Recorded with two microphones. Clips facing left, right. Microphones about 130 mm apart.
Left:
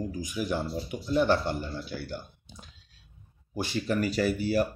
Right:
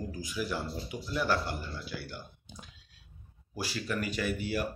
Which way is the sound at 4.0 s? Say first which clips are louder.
Left 6 dB; 35° left (ahead or behind).